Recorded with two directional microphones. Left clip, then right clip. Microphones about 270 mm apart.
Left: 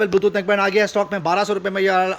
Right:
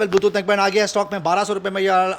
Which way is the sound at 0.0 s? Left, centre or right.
Centre.